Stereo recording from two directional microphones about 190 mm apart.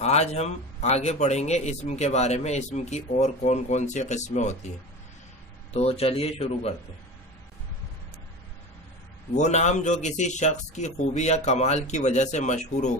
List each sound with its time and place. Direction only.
0.0 s a man's voice: 35° left (ahead or behind)
5.7 s a man's voice: 30° left (ahead or behind)
9.3 s a man's voice: 40° left (ahead or behind)